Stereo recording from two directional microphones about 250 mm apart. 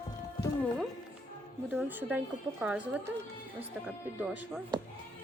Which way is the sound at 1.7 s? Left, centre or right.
Centre.